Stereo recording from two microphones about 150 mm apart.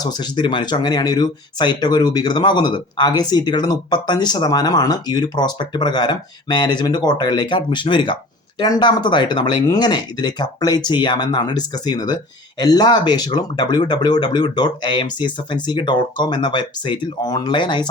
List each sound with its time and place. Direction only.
0.0 s speech: 30° left (ahead or behind)